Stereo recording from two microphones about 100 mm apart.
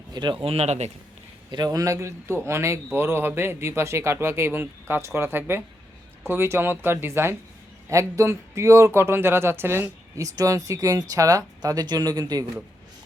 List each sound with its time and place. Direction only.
0.1 s speech: 45° right (ahead or behind)
0.4 s speech: 90° right
1.5 s a man's voice: 40° right (ahead or behind)